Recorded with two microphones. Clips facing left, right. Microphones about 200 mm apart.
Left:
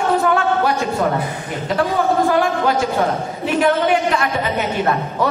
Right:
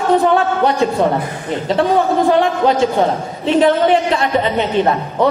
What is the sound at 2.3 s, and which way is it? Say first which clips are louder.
A man's voice: right 3 dB; 25° right (ahead or behind).